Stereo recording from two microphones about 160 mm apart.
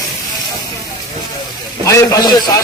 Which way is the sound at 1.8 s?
20° left (ahead or behind).